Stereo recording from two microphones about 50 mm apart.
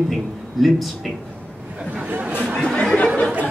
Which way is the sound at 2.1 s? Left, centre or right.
Right.